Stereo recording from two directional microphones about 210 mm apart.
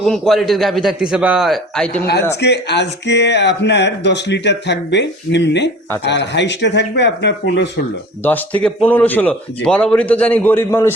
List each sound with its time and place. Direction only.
0.0 s a man's voice: centre (ahead or behind)
2.4 s speech: 55° left (ahead or behind)
8.2 s a man's voice: 10° left (ahead or behind)